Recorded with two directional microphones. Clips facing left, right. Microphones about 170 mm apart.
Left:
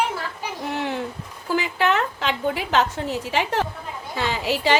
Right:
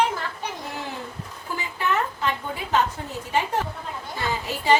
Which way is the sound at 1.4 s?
90° left.